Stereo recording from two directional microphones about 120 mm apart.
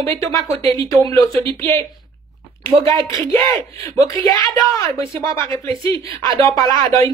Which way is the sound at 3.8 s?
30° left (ahead or behind).